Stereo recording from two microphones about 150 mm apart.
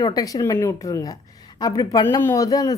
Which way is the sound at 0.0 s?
25° left (ahead or behind).